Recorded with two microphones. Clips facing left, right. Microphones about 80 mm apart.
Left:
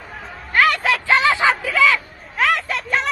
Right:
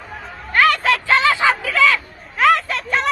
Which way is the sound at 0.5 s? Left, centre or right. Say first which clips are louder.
Right 1 dB; centre.